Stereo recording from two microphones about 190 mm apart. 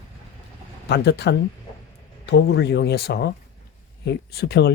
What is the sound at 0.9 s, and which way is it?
Speech, 60° left (ahead or behind).